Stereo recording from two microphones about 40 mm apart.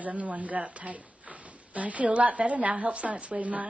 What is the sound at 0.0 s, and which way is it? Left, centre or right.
A woman's voice, right.